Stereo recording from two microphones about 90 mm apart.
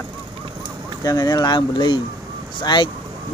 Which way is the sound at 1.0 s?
45° left (ahead or behind).